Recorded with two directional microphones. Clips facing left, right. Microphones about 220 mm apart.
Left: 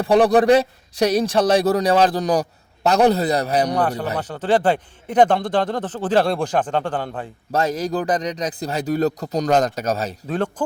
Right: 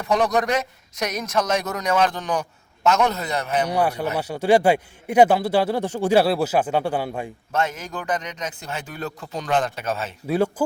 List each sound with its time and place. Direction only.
0.0 s a man's voice: 30° left (ahead or behind)
3.7 s a man's voice: 10° right (ahead or behind)
7.5 s a man's voice: 35° left (ahead or behind)
10.2 s a man's voice: 10° right (ahead or behind)